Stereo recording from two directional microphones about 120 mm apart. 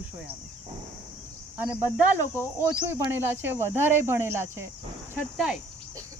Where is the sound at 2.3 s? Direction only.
15° right (ahead or behind).